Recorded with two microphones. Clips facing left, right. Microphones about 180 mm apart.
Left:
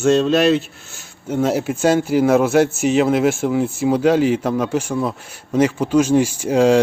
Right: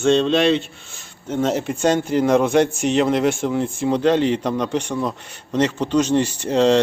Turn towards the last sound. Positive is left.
turn(degrees=10)  # may be behind; listen again after turning